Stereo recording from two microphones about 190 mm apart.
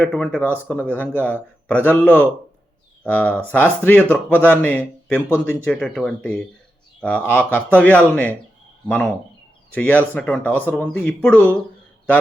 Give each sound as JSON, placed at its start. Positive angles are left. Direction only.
{"t": 0.0, "sound": "speech", "side_deg": 5}